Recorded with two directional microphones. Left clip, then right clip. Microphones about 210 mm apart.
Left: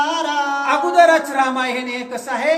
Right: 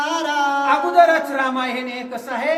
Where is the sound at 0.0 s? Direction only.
20° right (ahead or behind).